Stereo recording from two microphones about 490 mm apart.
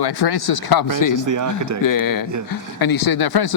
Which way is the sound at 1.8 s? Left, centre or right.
Left.